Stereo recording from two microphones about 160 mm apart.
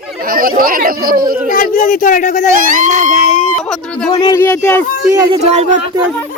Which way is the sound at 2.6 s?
55° right (ahead or behind).